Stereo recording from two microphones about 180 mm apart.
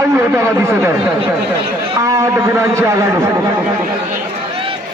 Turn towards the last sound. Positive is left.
turn(degrees=-15)  # may be behind; listen again after turning